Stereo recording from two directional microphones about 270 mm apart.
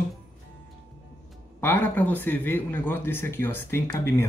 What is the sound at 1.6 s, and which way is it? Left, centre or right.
Speech, centre.